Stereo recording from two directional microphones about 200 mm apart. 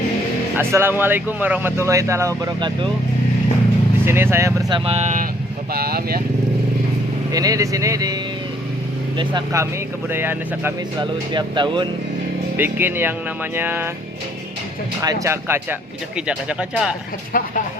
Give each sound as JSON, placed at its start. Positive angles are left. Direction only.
{"t": 0.5, "sound": "speech", "side_deg": -10}
{"t": 4.0, "sound": "speech", "side_deg": -10}
{"t": 4.9, "sound": "speech", "side_deg": -35}
{"t": 5.7, "sound": "speech", "side_deg": -50}
{"t": 7.3, "sound": "speech", "side_deg": -15}
{"t": 11.0, "sound": "speech", "side_deg": -25}
{"t": 12.5, "sound": "speech", "side_deg": -10}
{"t": 15.0, "sound": "speech", "side_deg": -15}
{"t": 17.3, "sound": "speech", "side_deg": 45}